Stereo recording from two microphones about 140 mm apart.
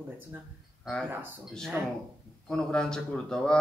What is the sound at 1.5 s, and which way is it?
Speech, 5° left (ahead or behind).